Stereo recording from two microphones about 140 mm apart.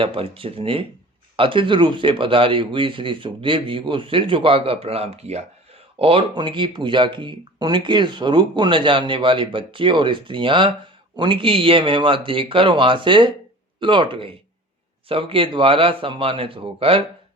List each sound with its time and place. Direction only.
0.0 s speech: 40° right (ahead or behind)